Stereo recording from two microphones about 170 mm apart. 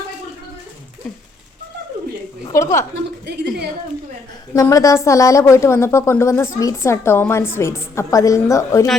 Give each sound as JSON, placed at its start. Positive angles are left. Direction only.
{"t": 2.4, "sound": "a woman's voice", "side_deg": 20}
{"t": 4.5, "sound": "a woman's voice", "side_deg": 20}